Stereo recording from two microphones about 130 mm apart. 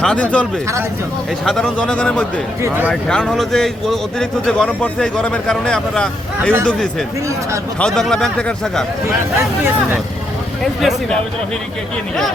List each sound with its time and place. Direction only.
0.0 s a man's voice: 10° left (ahead or behind)
1.5 s a man's voice: 5° left (ahead or behind)
2.6 s speech: 20° right (ahead or behind)
2.9 s a man's voice: 5° left (ahead or behind)
7.8 s a man's voice: 5° left (ahead or behind)
10.8 s a man's voice: centre (ahead or behind)